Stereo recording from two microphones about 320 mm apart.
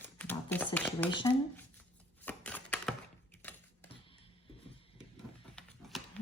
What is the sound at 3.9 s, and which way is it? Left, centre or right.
Music, centre.